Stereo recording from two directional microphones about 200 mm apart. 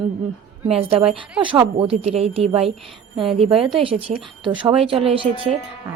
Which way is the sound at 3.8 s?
25° right (ahead or behind).